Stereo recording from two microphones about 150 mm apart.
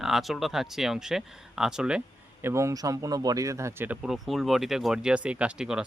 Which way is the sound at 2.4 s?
20° right (ahead or behind).